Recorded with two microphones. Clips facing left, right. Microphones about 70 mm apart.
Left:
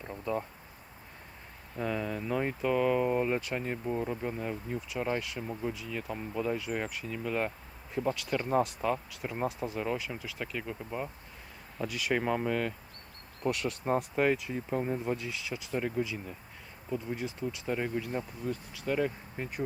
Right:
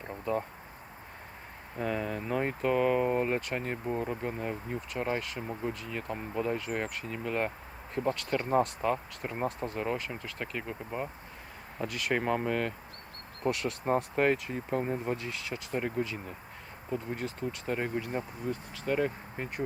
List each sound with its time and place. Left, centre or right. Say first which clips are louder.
0.0 s a sound: right 2 dB; centre
1.7 s speech: right 1 dB; centre
7.9 s speech: right 1 dB; centre
9.6 s speech: even; centre
9.8 s speech: right 1 dB; centre
10.2 s speech: even; centre
10.4 s speech: even; centre
11.9 s speech: left 1 dB; centre
12.1 s speech: even; centre
16.0 s speech: even; centre
17.2 s speech: even; centre
17.7 s speech: even; centre